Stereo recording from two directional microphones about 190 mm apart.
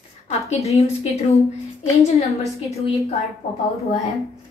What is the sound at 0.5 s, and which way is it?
Speech, 35° left (ahead or behind).